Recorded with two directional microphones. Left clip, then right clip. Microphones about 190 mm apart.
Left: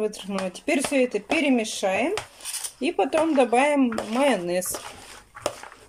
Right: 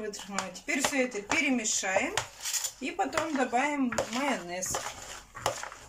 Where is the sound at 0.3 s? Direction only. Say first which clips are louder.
Left 4 dB; 60° left (ahead or behind).